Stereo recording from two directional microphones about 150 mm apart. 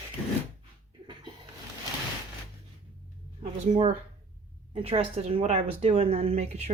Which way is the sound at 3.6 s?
45° right (ahead or behind).